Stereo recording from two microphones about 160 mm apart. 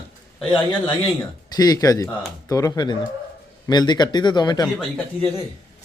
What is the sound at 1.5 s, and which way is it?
Speech, 25° left (ahead or behind).